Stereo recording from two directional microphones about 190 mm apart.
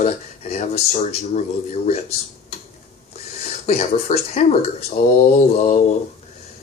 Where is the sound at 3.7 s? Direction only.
35° left (ahead or behind).